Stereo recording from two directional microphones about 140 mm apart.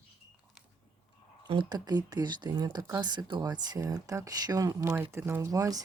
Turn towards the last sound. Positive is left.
turn(degrees=-25)  # may be behind; listen again after turning